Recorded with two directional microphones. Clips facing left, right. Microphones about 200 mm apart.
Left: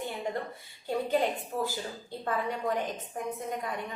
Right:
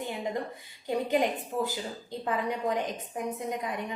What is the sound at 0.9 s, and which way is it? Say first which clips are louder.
A woman's voice: right 1 dB; 15° right (ahead or behind).